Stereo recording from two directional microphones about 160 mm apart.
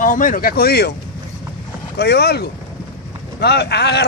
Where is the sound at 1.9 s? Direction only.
90° left.